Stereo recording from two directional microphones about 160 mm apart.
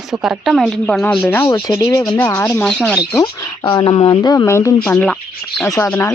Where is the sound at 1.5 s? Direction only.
25° left (ahead or behind).